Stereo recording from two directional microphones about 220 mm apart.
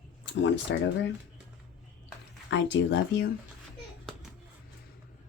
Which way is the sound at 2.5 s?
55° left (ahead or behind).